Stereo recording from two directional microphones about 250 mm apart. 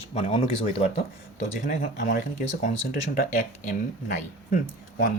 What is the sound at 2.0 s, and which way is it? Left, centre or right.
Speech, left.